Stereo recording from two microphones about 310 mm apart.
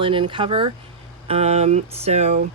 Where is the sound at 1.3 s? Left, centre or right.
Centre.